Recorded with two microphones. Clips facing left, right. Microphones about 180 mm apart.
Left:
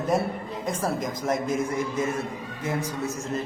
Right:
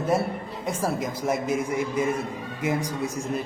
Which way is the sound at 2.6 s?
15° right (ahead or behind).